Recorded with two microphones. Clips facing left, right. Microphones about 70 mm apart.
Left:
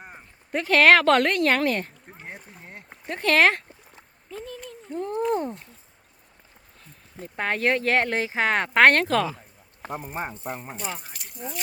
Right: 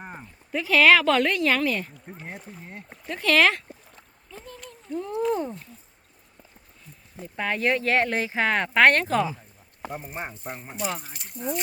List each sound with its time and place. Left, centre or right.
0.0 s a sound: centre
0.5 s speech: left
2.6 s a sound: centre
3.1 s speech: left
4.9 s speech: left
7.3 s speech: left
10.9 s speech: centre